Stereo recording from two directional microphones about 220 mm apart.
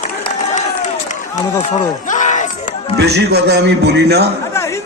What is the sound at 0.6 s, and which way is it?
Run, 35° left (ahead or behind).